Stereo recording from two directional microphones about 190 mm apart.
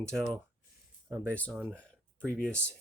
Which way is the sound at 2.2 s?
5° left (ahead or behind).